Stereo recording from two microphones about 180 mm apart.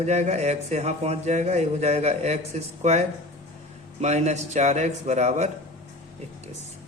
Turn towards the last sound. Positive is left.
turn(degrees=-40)  # may be behind; listen again after turning